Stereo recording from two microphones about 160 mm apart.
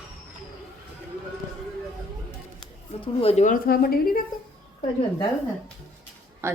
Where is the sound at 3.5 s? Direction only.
70° left (ahead or behind).